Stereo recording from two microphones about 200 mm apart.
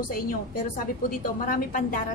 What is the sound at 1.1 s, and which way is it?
Speech, 45° left (ahead or behind).